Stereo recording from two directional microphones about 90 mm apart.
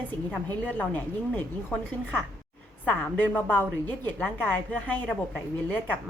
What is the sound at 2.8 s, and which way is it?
A woman's voice, 20° left (ahead or behind).